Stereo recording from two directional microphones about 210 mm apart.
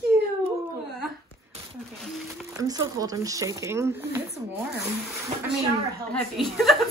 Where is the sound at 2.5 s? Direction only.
15° right (ahead or behind).